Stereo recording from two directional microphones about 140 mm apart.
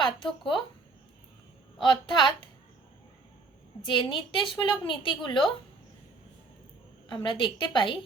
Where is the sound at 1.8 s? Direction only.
35° left (ahead or behind).